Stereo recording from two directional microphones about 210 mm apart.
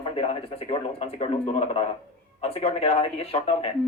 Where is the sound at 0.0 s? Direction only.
30° left (ahead or behind).